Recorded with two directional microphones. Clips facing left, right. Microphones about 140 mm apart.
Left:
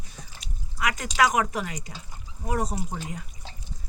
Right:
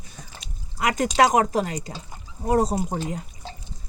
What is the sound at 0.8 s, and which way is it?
A man's voice, 35° right (ahead or behind).